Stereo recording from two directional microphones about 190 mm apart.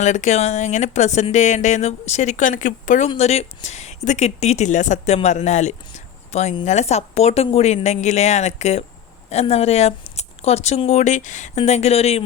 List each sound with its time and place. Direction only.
0.0 s speech: 40° left (ahead or behind)